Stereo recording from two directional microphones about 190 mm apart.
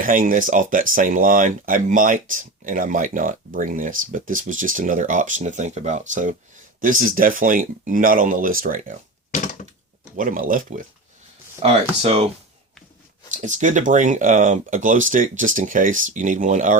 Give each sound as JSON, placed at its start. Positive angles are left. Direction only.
{"t": 0.0, "sound": "speech", "side_deg": -45}
{"t": 9.3, "sound": "a sound", "side_deg": 40}
{"t": 10.2, "sound": "speech", "side_deg": -45}
{"t": 11.6, "sound": "speech", "side_deg": -30}
{"t": 13.3, "sound": "speech", "side_deg": -40}